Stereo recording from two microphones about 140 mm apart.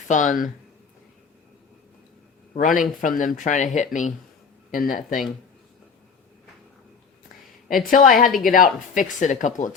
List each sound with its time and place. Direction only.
0.1 s speech: 65° left (ahead or behind)
2.6 s speech: 70° left (ahead or behind)
4.7 s speech: 85° left
7.9 s speech: 80° left; by 9.7 s 65° left (ahead or behind)